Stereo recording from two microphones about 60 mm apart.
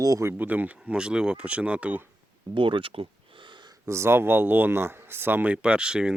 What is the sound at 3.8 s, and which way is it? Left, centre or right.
Speech, right.